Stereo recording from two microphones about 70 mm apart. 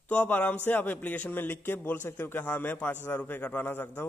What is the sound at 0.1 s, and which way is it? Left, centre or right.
A man's voice, left.